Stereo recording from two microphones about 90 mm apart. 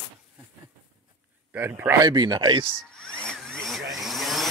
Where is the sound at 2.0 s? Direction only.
55° right (ahead or behind).